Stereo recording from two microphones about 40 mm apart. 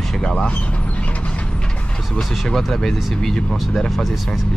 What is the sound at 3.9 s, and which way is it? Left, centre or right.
Speech, centre.